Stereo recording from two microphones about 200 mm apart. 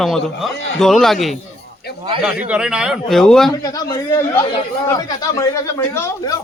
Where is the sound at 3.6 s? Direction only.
20° left (ahead or behind).